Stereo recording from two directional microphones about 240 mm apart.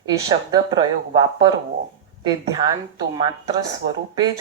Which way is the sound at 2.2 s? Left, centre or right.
Centre.